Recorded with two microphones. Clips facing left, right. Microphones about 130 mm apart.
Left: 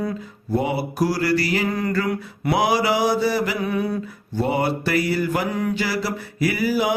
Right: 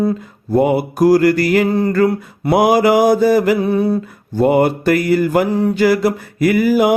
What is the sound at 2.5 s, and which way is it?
Mantra, 50° right (ahead or behind).